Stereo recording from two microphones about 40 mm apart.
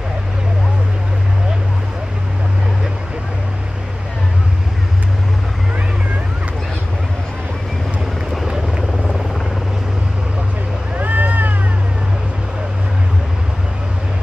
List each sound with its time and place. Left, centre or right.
11.0 s vehicle: right